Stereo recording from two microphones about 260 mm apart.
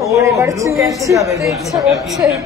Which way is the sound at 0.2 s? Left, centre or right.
Centre.